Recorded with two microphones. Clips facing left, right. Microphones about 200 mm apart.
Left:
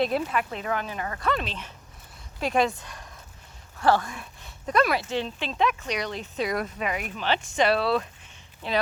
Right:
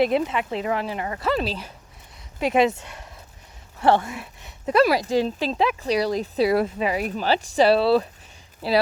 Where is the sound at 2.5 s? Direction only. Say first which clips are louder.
Right 5 dB; 20° right (ahead or behind).